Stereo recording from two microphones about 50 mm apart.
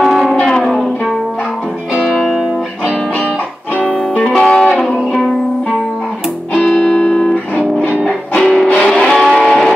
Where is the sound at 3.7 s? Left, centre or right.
Left.